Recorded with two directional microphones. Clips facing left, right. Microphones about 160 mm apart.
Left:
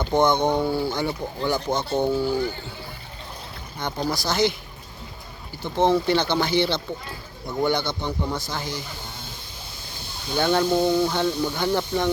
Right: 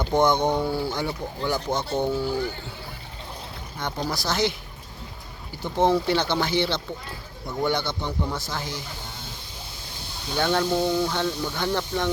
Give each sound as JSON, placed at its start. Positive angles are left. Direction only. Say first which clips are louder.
{"t": 0.0, "sound": "speech", "louder": "left 1 dB", "side_deg": -10}
{"t": 3.8, "sound": "speech", "louder": "left 2 dB", "side_deg": 0}
{"t": 5.7, "sound": "speech", "louder": "left 1 dB", "side_deg": -10}
{"t": 10.3, "sound": "speech", "louder": "left 2 dB", "side_deg": 0}
{"t": 10.8, "sound": "snake", "louder": "left 3 dB", "side_deg": 20}
{"t": 11.1, "sound": "speech", "louder": "left 3 dB", "side_deg": 5}